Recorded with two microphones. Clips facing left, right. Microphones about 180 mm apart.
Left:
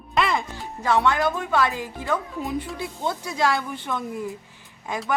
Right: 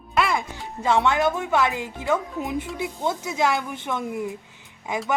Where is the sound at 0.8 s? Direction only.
20° right (ahead or behind).